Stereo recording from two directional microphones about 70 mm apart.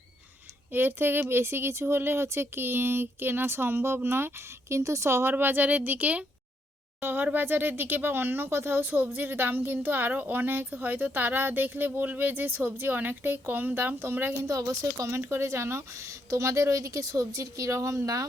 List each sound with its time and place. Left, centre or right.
0.7 s speech: right
4.8 s speech: right
14.5 s speech: right
15.2 s speech: right